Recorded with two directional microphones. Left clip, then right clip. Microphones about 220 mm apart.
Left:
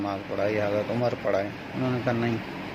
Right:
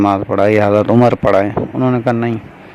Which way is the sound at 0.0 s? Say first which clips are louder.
Right 15 dB; 40° right (ahead or behind).